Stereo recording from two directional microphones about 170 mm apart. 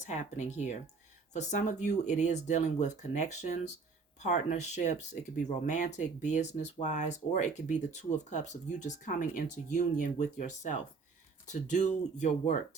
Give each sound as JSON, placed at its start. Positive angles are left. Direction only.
{"t": 0.0, "sound": "speech", "side_deg": 45}